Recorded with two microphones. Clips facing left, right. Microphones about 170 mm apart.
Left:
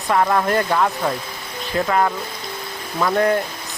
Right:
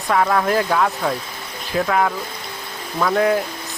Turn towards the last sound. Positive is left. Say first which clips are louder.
# even
turn(degrees=0)  # may be behind; listen again after turning